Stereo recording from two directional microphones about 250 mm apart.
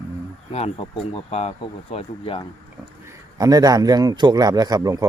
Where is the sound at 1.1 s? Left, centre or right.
Left.